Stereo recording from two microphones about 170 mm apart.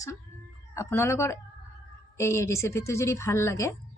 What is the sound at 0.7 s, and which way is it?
Speech, 15° left (ahead or behind).